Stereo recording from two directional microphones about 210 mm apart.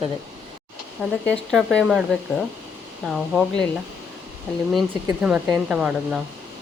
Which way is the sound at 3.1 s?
Centre (ahead or behind).